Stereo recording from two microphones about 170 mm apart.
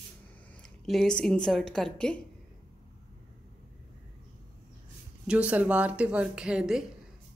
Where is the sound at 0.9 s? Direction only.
5° left (ahead or behind).